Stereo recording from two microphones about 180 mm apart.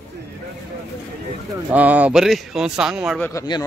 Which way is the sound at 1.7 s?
10° right (ahead or behind).